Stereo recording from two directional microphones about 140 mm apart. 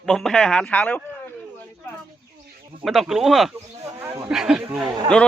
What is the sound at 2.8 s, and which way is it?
Speech, centre (ahead or behind).